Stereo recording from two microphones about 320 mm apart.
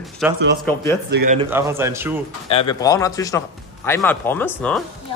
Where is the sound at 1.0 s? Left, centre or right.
Right.